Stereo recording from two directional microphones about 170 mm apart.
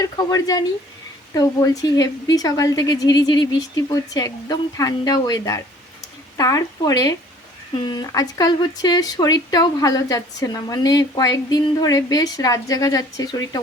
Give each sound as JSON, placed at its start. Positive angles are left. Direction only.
{"t": 0.0, "sound": "speech", "side_deg": 20}